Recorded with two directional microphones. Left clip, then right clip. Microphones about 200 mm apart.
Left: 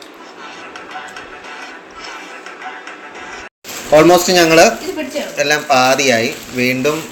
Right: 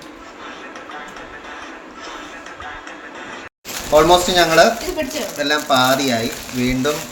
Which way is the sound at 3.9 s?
15° left (ahead or behind).